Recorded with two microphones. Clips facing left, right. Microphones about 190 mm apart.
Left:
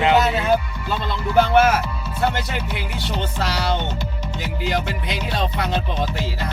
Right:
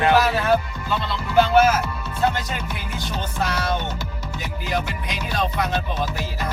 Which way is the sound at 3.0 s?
75° left (ahead or behind).